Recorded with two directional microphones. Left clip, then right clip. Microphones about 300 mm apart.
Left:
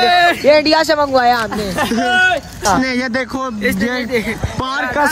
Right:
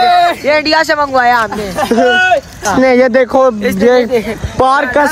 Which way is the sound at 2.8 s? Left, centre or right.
Centre.